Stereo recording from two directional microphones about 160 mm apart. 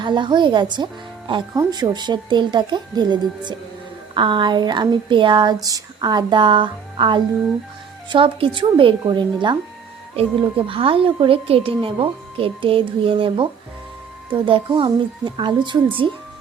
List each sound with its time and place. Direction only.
0.0 s a woman's voice: 30° right (ahead or behind)